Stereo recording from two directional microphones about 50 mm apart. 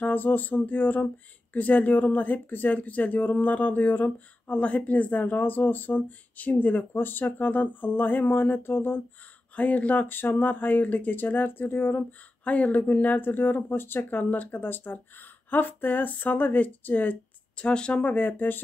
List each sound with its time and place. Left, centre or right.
0.0 s speech: left
9.6 s speech: left
12.0 s speech: left
17.6 s speech: centre
18.0 s speech: left